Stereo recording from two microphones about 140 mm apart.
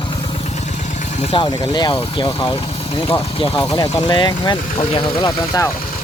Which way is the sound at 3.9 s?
35° left (ahead or behind).